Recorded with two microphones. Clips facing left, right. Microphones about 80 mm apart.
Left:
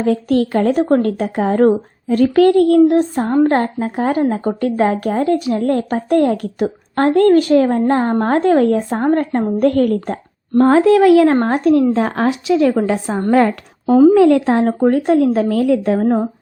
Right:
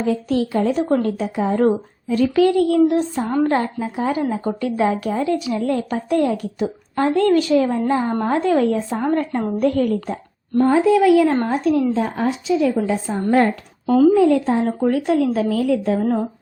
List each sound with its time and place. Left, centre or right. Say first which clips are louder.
0.0 s a woman's voice: left 4 dB; left
10.6 s a woman's voice: left 4 dB; left
11.4 s a woman's voice: left 5 dB; left
14.8 s a woman's voice: left 5 dB; left